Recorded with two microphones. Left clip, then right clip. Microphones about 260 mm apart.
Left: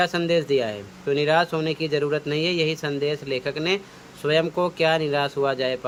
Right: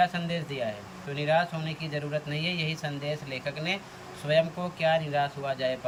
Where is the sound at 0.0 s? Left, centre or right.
Centre.